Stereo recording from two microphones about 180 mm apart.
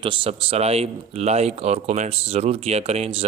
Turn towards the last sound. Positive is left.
turn(degrees=-35)  # may be behind; listen again after turning